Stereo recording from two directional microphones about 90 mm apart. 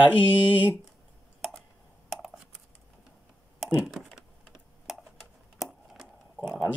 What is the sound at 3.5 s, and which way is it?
Computer keyboard, 5° right (ahead or behind).